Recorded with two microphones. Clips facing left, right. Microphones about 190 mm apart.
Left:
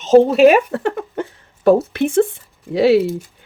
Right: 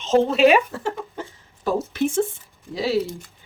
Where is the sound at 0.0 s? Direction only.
40° left (ahead or behind); by 3.1 s 65° left (ahead or behind).